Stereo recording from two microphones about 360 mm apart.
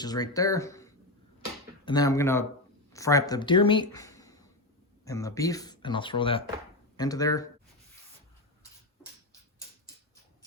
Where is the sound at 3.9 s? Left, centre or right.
Centre.